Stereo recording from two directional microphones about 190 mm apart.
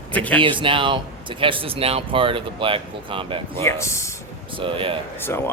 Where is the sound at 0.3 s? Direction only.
25° right (ahead or behind).